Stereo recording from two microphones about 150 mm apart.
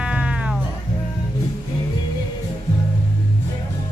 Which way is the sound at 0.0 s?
5° right (ahead or behind).